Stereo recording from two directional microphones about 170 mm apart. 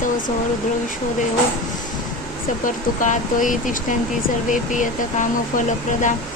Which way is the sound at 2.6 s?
50° left (ahead or behind).